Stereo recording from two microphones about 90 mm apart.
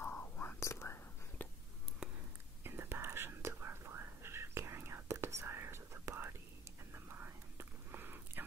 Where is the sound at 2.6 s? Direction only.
25° right (ahead or behind).